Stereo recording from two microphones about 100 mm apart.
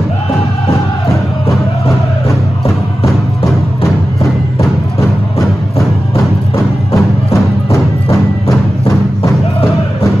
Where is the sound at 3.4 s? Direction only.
30° left (ahead or behind).